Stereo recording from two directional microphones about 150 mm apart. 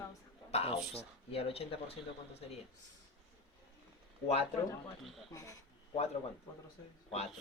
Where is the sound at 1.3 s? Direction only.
40° left (ahead or behind).